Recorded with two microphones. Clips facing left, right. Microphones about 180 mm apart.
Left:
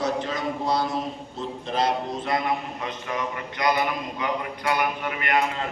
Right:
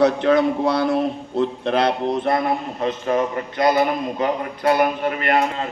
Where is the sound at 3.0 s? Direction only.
50° right (ahead or behind).